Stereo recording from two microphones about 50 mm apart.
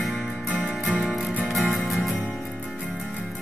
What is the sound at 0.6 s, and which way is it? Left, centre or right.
Music, right.